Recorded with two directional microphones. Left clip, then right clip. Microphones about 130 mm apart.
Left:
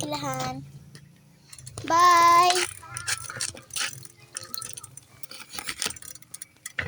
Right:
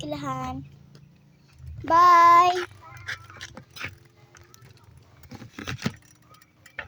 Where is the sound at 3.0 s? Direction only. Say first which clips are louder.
Left 5 dB; 50° left (ahead or behind).